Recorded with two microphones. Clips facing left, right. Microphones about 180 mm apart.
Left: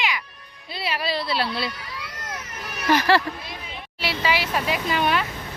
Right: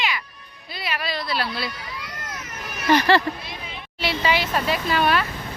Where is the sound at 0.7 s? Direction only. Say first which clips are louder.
Left 2 dB; 30° left (ahead or behind).